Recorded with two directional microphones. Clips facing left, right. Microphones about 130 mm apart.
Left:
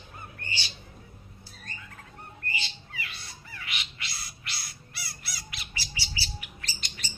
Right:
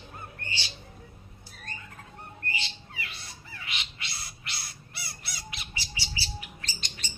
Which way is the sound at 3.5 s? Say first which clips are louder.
Even; 25° right (ahead or behind).